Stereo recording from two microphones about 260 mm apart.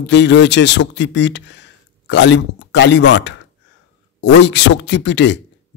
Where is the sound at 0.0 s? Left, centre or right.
Left.